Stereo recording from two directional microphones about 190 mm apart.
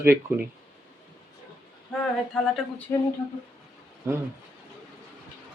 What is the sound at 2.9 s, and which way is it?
Speech, 15° left (ahead or behind).